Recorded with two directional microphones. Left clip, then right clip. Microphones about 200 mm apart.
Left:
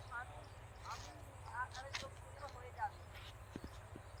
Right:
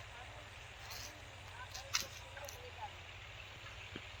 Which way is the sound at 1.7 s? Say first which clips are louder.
Right 6 dB; 25° left (ahead or behind).